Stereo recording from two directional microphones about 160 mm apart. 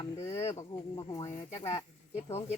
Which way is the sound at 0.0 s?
40° left (ahead or behind).